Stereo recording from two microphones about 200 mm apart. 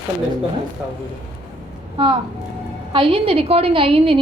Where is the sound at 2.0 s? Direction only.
25° right (ahead or behind).